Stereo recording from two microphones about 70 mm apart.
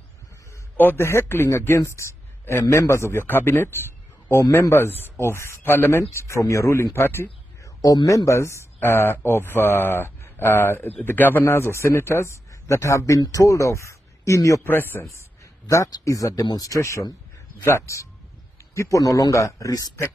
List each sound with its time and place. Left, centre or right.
0.7 s a man's voice: left
7.6 s speech: left
8.3 s a man's voice: left
11.4 s a man's voice: left
14.6 s a man's voice: left
15.9 s a man's voice: left